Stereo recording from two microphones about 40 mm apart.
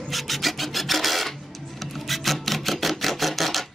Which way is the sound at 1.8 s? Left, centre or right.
Centre.